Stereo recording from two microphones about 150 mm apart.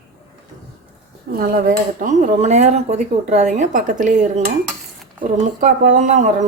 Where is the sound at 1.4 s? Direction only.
70° right (ahead or behind).